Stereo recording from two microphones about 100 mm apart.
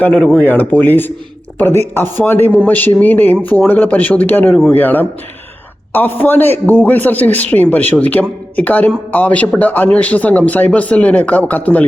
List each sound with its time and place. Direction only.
0.0 s speech: 10° left (ahead or behind)